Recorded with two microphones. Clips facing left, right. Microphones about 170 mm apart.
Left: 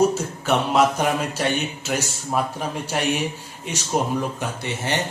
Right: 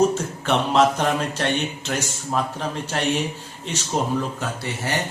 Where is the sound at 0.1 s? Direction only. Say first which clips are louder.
Even; 5° left (ahead or behind).